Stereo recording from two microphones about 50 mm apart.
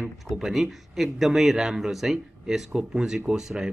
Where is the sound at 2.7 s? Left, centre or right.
Centre.